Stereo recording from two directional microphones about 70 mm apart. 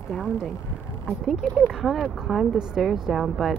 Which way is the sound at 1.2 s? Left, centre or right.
Centre.